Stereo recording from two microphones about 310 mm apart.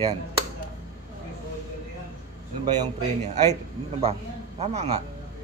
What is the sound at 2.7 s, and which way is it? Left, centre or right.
Speech, right.